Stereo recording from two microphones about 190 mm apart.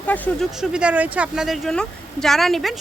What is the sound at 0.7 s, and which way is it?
Speech, 5° right (ahead or behind).